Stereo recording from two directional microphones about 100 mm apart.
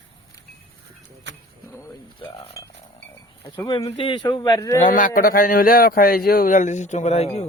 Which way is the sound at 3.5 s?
50° left (ahead or behind).